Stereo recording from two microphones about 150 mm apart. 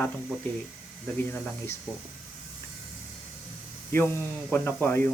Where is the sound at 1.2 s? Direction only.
15° left (ahead or behind).